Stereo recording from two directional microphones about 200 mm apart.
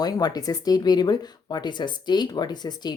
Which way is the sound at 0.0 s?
20° left (ahead or behind).